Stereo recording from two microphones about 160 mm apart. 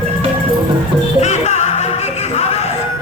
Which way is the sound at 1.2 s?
45° left (ahead or behind).